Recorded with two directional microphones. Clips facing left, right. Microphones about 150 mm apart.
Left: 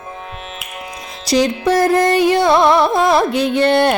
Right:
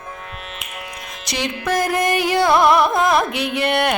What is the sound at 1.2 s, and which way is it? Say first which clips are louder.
Music: left 9 dB; 35° left (ahead or behind).